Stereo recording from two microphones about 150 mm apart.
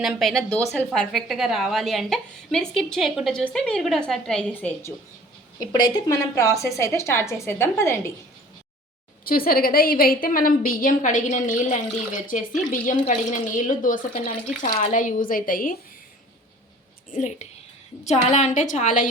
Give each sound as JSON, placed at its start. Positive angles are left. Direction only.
{"t": 0.0, "sound": "a woman's voice", "side_deg": 0}
{"t": 5.7, "sound": "a woman's voice", "side_deg": 25}
{"t": 9.2, "sound": "a woman's voice", "side_deg": 75}
{"t": 17.1, "sound": "a woman's voice", "side_deg": 55}